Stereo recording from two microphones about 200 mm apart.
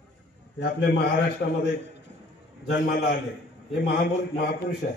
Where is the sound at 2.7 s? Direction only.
55° left (ahead or behind).